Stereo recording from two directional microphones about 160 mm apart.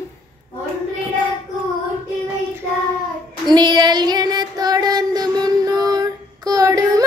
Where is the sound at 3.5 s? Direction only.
25° right (ahead or behind).